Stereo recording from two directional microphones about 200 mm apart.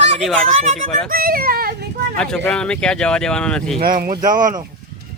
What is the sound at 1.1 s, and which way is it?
Speech, 45° right (ahead or behind).